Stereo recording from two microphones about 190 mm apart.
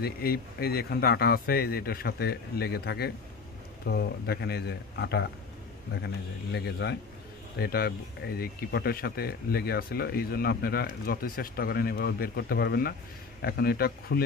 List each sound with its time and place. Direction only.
0.0 s speech: 55° left (ahead or behind)